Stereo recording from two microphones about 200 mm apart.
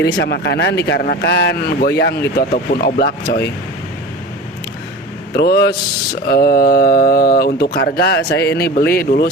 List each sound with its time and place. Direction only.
0.0 s speech: 55° left (ahead or behind)
5.3 s speech: 50° left (ahead or behind)